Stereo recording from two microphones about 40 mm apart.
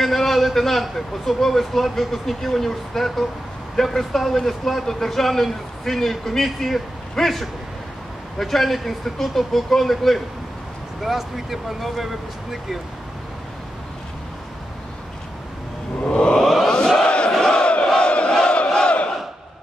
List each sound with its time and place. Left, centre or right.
0.0 s a man's voice: centre
16.0 s a sound: left
17.4 s crowd: left
18.3 s battle cry: left